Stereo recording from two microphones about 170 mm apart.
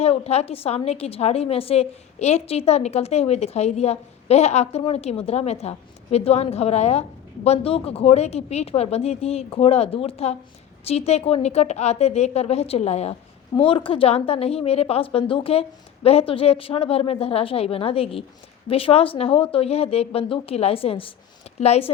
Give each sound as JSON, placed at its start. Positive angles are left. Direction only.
{"t": 0.0, "sound": "a woman's voice", "side_deg": 40}